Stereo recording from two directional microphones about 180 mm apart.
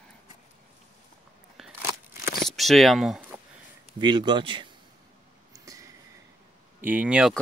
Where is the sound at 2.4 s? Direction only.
Centre (ahead or behind).